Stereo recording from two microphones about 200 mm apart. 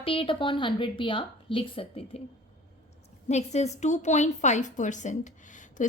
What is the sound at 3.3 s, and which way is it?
A woman's voice, 35° left (ahead or behind).